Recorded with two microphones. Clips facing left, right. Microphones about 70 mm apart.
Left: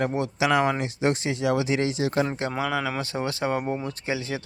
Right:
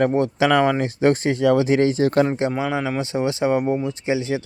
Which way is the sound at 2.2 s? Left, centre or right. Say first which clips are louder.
Right 6 dB; right.